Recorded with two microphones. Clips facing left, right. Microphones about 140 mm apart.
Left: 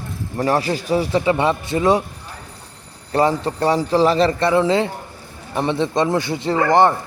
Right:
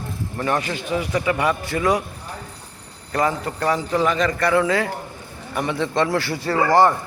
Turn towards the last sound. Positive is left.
turn(degrees=20)  # may be behind; listen again after turning